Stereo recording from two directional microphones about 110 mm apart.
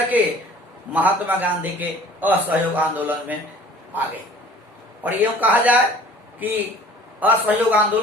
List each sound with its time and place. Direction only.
0.2 s a man's voice: 15° right (ahead or behind)
5.0 s a man's voice: 15° right (ahead or behind)